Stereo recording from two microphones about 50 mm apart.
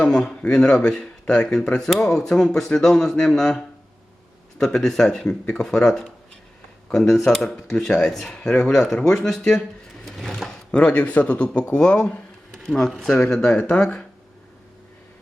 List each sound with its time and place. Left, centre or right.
0.0 s speech: centre
10.1 s sewing machine: centre
10.7 s speech: left
13.3 s speech: left